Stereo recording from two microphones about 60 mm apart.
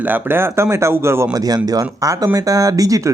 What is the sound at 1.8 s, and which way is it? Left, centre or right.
Speech, right.